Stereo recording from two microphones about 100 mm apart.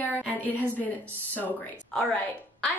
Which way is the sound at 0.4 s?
15° left (ahead or behind).